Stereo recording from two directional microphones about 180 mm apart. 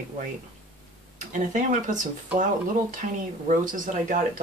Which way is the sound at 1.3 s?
45° right (ahead or behind).